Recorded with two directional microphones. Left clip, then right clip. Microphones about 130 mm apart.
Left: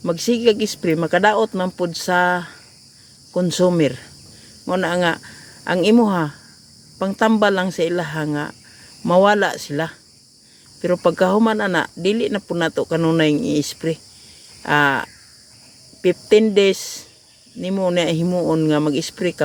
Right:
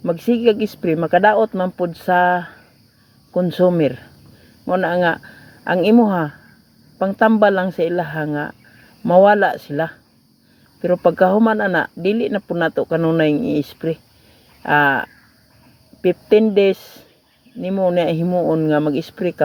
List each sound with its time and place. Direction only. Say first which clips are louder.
0.0 s speech: right 1 dB; 20° left (ahead or behind)